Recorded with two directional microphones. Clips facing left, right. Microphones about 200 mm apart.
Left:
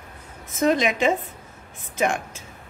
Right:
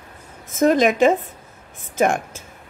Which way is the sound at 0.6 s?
45° right (ahead or behind).